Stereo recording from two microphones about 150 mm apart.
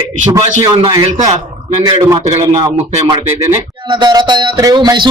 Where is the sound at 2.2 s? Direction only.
40° right (ahead or behind).